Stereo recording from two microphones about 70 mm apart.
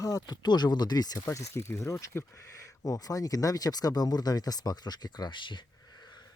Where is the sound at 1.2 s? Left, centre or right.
Left.